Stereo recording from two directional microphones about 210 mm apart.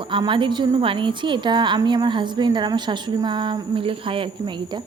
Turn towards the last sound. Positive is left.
turn(degrees=-20)  # may be behind; listen again after turning